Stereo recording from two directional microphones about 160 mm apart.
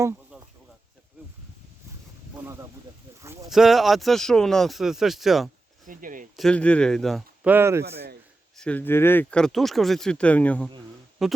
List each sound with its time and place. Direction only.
2.3 s a sound: 15° right (ahead or behind)
3.5 s speech: centre (ahead or behind)
5.8 s a sound: 55° right (ahead or behind)
6.3 s speech: 5° left (ahead or behind)
7.4 s speech: 15° right (ahead or behind)
8.5 s speech: 10° left (ahead or behind)
11.2 s speech: centre (ahead or behind)